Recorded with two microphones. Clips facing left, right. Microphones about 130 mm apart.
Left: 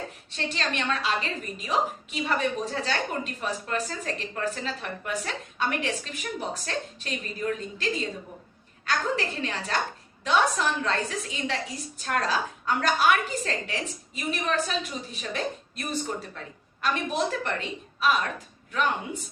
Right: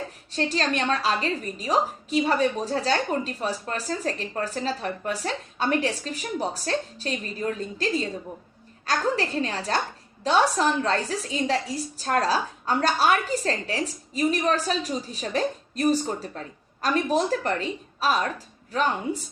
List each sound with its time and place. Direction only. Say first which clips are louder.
0.3 s a woman's voice: right 6 dB; 40° right (ahead or behind)
8.9 s a woman's voice: right 3 dB; 35° right (ahead or behind)